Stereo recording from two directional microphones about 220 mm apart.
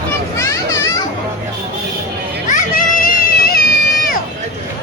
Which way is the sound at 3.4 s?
45° left (ahead or behind).